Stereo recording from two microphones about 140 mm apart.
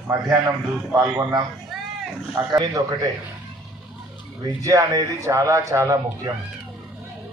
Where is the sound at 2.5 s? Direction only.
30° right (ahead or behind).